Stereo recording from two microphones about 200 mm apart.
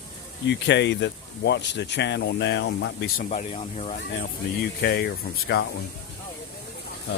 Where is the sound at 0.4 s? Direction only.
60° left (ahead or behind).